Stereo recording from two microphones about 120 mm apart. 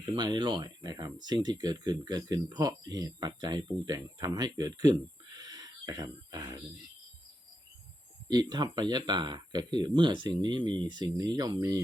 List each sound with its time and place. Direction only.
0.0 s speech: 40° right (ahead or behind)
5.4 s a sound: 35° right (ahead or behind)
8.3 s speech: 35° right (ahead or behind)